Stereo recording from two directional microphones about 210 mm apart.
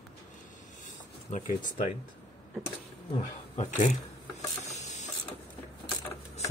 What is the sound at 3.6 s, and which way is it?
Mechanisms, 35° left (ahead or behind).